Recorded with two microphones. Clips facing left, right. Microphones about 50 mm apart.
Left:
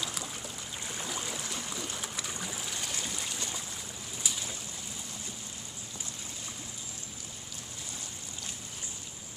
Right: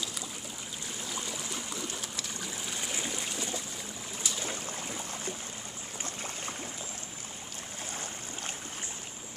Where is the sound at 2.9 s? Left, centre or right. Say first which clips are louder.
Right 2 dB; centre.